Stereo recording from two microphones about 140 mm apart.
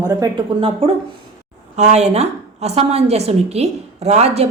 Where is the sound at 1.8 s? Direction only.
50° right (ahead or behind).